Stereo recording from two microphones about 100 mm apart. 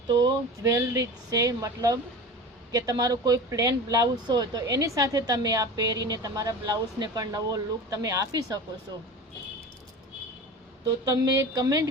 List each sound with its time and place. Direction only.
0.1 s speech: 35° right (ahead or behind)
11.0 s speech: 40° right (ahead or behind)